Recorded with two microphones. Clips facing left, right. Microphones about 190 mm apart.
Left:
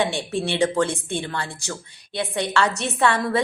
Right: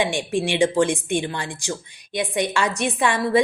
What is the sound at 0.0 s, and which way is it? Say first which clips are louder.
A woman's voice: right 1 dB; 15° right (ahead or behind).